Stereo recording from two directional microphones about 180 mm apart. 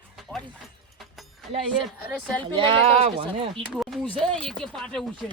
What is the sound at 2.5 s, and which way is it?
Speech, 30° right (ahead or behind).